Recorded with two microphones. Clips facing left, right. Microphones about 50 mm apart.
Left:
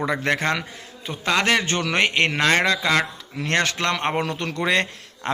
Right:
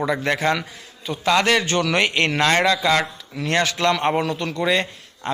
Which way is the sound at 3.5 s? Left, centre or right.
Left.